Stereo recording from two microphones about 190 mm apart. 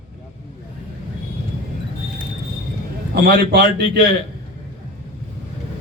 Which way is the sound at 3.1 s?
55° right (ahead or behind).